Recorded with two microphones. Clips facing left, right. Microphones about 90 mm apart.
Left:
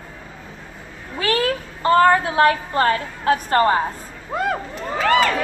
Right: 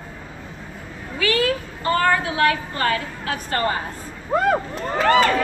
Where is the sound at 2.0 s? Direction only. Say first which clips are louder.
Left 3 dB; 35° left (ahead or behind).